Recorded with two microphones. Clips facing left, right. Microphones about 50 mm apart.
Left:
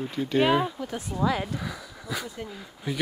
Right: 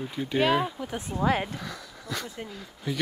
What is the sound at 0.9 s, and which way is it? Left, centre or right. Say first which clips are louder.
Speech: even; right.